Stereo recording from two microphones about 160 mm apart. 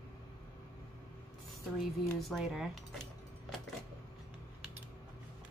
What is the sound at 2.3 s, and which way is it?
Speech, centre (ahead or behind).